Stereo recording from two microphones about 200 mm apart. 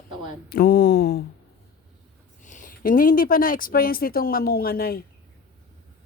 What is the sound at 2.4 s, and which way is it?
Speech, 40° left (ahead or behind).